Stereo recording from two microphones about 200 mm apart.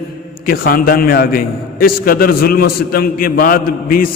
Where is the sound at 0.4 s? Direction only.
45° left (ahead or behind).